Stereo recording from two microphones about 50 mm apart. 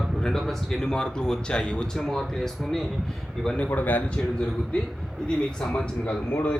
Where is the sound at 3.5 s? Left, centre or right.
Left.